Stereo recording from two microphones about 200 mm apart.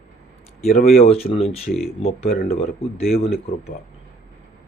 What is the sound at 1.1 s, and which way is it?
Speech, 30° left (ahead or behind).